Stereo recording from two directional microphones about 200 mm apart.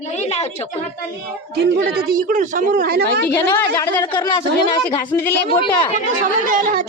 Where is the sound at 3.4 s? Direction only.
15° left (ahead or behind).